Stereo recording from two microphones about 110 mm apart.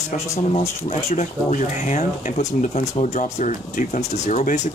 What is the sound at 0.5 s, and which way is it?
Speech, 75° left (ahead or behind).